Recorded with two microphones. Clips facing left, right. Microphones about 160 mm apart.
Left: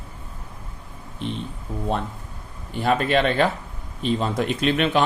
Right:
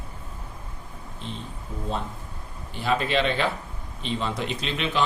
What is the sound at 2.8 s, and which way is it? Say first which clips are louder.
Speech: left 4 dB; 50° left (ahead or behind).